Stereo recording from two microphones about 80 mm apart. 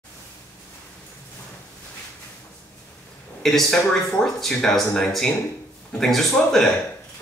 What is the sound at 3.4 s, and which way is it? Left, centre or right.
A man's voice, centre.